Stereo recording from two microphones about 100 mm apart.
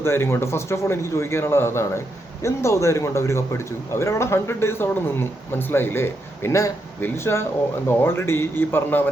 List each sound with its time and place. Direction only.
0.0 s speech: 25° left (ahead or behind)